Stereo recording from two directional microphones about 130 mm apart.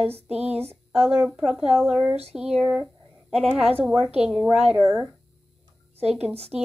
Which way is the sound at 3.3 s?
50° right (ahead or behind).